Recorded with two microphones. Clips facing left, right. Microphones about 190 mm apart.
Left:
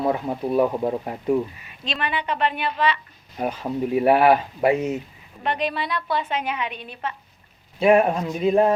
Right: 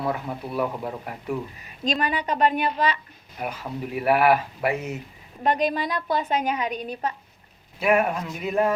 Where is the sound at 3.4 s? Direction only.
25° left (ahead or behind).